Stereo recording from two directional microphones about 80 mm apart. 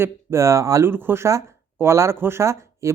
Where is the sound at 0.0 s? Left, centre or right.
Right.